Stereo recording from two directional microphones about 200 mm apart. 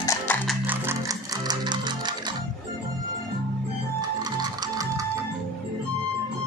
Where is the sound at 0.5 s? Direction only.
10° right (ahead or behind).